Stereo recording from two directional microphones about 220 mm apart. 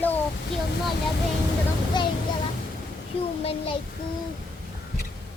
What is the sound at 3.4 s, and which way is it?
Speech, 25° left (ahead or behind).